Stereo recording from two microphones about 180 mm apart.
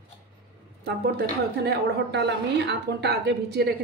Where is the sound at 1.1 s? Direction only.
60° right (ahead or behind).